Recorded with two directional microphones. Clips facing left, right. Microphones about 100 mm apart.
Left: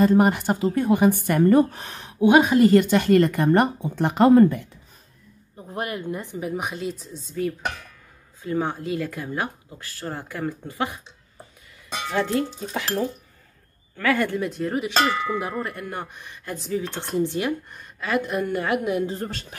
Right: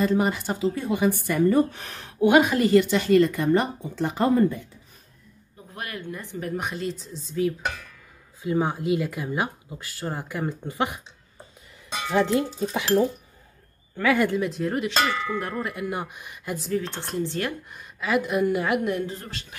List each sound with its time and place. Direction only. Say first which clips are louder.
0.0 s speech: left 5 dB; 50° left (ahead or behind)
1.8 s speech: left 1 dB; 20° left (ahead or behind)
2.6 s speech: left 3 dB; 50° left (ahead or behind); by 4.6 s 70° left (ahead or behind)
5.7 s speech: left 6 dB; 20° left (ahead or behind)
6.4 s a woman's voice: right 1 dB; 5° left (ahead or behind)
8.5 s speech: right 2 dB; 10° right (ahead or behind)
12.1 s speech: right 2 dB; 15° right (ahead or behind)
14.3 s a woman's voice: even; centre (ahead or behind)
15.0 s cowbell: left 3 dB; 15° left (ahead or behind)
15.4 s speech: even; centre (ahead or behind)
16.5 s a woman's voice: even; centre (ahead or behind)
17.3 s cowbell: left 3 dB; 15° left (ahead or behind)
17.6 s a woman's voice: right 1 dB; centre (ahead or behind)
19.1 s speech: left 7 dB; 40° left (ahead or behind)